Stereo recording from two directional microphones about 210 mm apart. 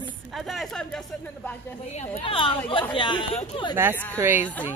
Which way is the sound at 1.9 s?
30° left (ahead or behind).